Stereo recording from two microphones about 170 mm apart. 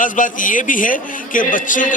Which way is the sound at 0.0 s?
50° left (ahead or behind).